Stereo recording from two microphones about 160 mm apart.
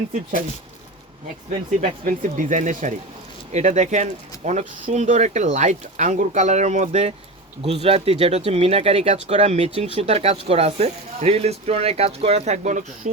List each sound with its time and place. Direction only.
0.1 s speech: 60° right (ahead or behind)
1.8 s speech: 55° right (ahead or behind)